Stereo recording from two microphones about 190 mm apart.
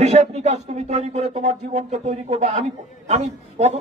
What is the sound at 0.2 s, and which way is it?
A man's voice, 35° right (ahead or behind).